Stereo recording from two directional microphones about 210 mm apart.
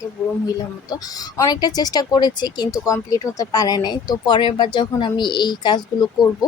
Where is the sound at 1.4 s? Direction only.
20° left (ahead or behind).